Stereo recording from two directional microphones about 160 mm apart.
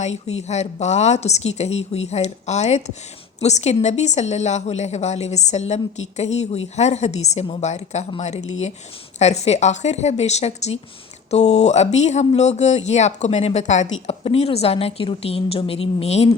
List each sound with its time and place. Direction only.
0.0 s speech: 45° left (ahead or behind)